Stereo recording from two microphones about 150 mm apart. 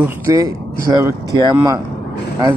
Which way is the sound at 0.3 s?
25° right (ahead or behind).